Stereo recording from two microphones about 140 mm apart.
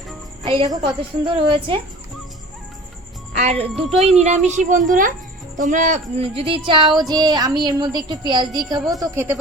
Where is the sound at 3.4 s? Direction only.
50° right (ahead or behind).